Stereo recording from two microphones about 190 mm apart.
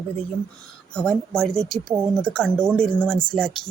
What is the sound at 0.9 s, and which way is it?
Speech, 5° left (ahead or behind).